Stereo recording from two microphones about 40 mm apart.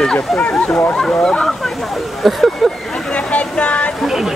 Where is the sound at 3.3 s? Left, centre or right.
Left.